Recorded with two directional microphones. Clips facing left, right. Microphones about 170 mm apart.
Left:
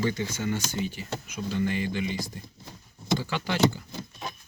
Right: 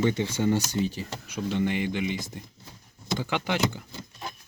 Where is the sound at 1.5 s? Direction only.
20° right (ahead or behind).